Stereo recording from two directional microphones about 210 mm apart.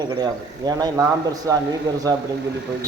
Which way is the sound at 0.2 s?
20° right (ahead or behind).